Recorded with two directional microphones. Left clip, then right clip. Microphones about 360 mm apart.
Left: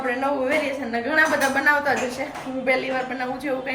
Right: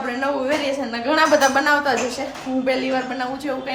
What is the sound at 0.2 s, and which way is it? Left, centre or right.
A woman's voice, centre.